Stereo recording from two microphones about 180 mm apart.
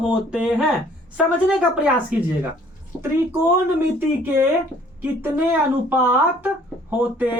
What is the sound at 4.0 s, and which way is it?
Speech, 10° right (ahead or behind).